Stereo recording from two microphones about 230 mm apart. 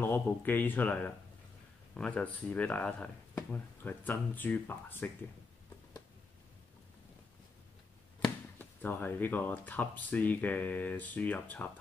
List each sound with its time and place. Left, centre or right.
0.0 s speech: centre
8.2 s speech: centre